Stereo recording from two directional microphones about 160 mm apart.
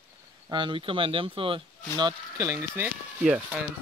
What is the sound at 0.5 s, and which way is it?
Speech, 30° right (ahead or behind).